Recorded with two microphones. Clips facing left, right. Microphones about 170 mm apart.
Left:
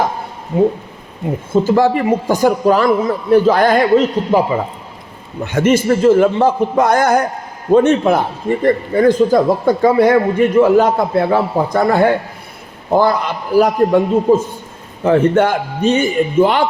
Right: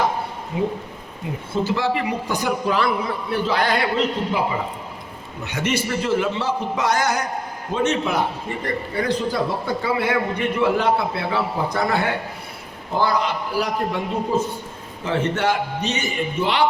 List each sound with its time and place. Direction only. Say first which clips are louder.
1.6 s a man's voice: left 8 dB; 45° left (ahead or behind)